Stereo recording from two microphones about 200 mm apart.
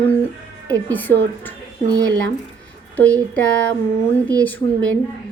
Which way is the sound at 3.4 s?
5° left (ahead or behind).